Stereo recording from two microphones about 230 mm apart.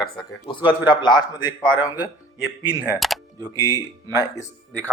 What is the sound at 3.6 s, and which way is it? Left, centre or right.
Speech, centre.